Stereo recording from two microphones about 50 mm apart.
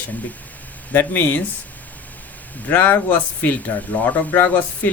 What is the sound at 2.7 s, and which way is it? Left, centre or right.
Speech, left.